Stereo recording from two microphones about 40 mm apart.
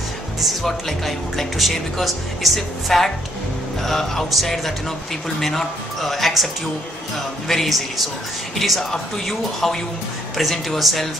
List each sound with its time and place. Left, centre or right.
0.4 s speech: centre
2.9 s speech: centre
5.4 s speech: centre
8.5 s speech: centre